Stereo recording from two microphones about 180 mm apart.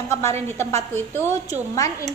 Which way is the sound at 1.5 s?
20° left (ahead or behind).